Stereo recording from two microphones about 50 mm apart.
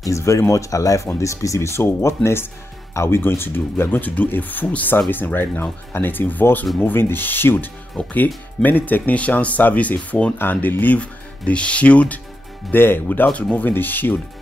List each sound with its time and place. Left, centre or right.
0.1 s speech: left
2.0 s speech: left
3.2 s speech: left
4.3 s speech: left
10.3 s speech: left
12.7 s speech: left
13.3 s speech: left